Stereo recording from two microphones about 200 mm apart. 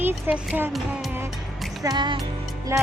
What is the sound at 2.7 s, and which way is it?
Music, 15° right (ahead or behind).